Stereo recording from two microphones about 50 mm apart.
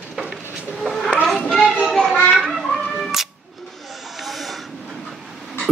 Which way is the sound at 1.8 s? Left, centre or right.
Centre.